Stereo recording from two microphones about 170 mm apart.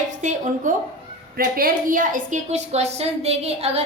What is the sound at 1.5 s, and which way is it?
A woman's voice, 55° right (ahead or behind).